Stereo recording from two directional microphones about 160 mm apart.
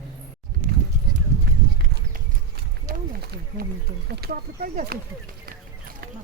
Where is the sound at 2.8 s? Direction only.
65° right (ahead or behind).